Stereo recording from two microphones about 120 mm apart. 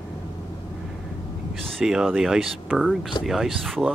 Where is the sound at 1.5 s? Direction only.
Centre (ahead or behind).